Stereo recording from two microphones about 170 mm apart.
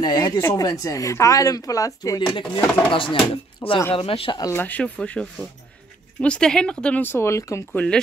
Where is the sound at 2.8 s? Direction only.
30° left (ahead or behind).